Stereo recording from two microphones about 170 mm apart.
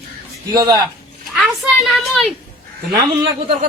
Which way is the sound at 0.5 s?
25° right (ahead or behind).